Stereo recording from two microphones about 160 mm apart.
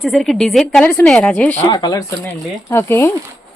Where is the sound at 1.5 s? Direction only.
25° left (ahead or behind).